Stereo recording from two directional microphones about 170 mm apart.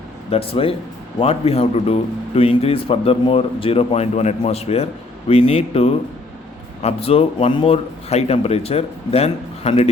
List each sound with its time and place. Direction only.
0.3 s a man's voice: 35° left (ahead or behind)